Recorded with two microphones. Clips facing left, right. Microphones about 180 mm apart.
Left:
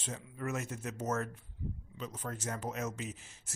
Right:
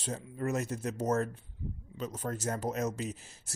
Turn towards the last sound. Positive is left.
turn(degrees=-40)  # may be behind; listen again after turning